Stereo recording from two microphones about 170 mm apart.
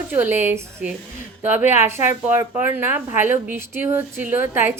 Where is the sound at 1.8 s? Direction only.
15° right (ahead or behind).